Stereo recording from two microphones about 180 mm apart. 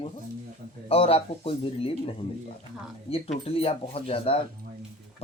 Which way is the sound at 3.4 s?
30° left (ahead or behind).